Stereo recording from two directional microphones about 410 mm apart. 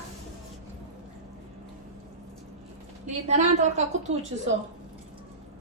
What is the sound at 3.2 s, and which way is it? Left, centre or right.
A woman's voice, centre.